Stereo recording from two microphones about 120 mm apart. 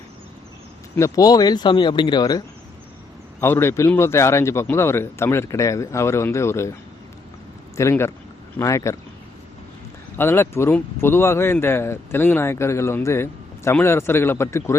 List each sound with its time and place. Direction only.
0.9 s speech: 25° left (ahead or behind)
3.4 s a man's voice: 20° left (ahead or behind)
7.8 s a man's voice: 20° left (ahead or behind)
10.2 s a man's voice: 20° left (ahead or behind)